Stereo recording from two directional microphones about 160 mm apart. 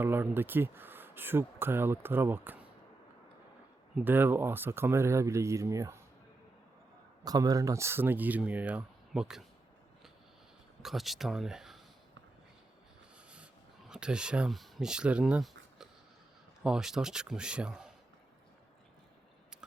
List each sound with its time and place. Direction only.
0.0 s speech: 15° right (ahead or behind)
3.9 s speech: 10° right (ahead or behind)
7.3 s speech: 25° right (ahead or behind); by 9.4 s 5° right (ahead or behind)
10.8 s speech: centre (ahead or behind)
13.3 s a sound: 5° right (ahead or behind)
16.6 s speech: 5° right (ahead or behind)